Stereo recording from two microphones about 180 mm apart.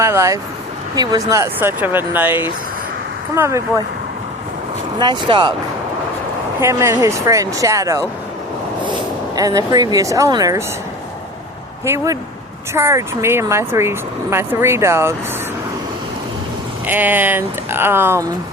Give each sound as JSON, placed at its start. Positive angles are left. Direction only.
{"t": 0.0, "sound": "speech", "side_deg": -15}
{"t": 4.9, "sound": "speech", "side_deg": -25}
{"t": 6.6, "sound": "speech", "side_deg": -15}
{"t": 12.7, "sound": "speech", "side_deg": -15}
{"t": 16.8, "sound": "speech", "side_deg": -10}